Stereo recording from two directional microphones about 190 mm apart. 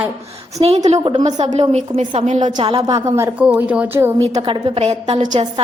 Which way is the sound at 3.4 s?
5° right (ahead or behind).